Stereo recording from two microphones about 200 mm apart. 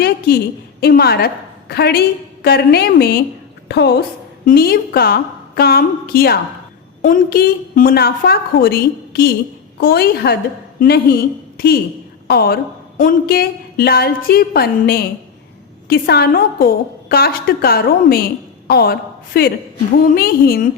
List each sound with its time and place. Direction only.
0.0 s a woman's voice: 50° left (ahead or behind)